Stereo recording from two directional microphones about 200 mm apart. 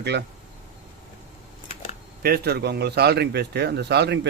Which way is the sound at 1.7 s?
30° left (ahead or behind).